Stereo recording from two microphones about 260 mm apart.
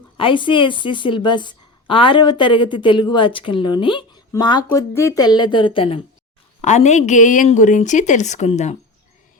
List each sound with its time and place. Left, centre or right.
0.2 s a woman's voice: centre